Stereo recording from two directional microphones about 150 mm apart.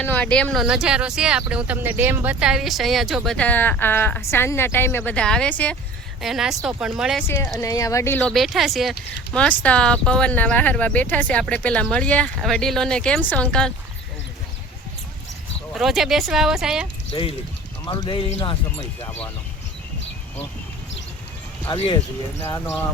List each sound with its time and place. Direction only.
0.0 s speech: 10° left (ahead or behind)
0.6 s speech: 5° right (ahead or behind)
6.2 s speech: centre (ahead or behind)
7.2 s speech: 15° left (ahead or behind)
8.2 s speech: centre (ahead or behind)
15.7 s speech: centre (ahead or behind)
17.1 s speech: 40° left (ahead or behind)
18.3 s speech: 45° left (ahead or behind)
19.0 s speech: 10° left (ahead or behind)
21.7 s speech: 30° left (ahead or behind)
22.4 s speech: 15° left (ahead or behind)